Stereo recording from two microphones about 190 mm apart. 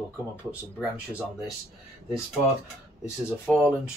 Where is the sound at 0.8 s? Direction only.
Centre (ahead or behind).